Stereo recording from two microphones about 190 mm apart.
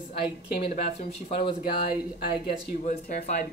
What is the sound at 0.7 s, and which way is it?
Speech, 40° left (ahead or behind).